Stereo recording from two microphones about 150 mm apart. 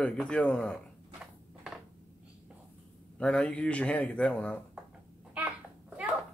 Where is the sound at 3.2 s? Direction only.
5° left (ahead or behind).